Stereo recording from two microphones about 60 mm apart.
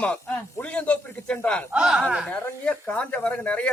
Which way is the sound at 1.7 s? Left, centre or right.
Centre.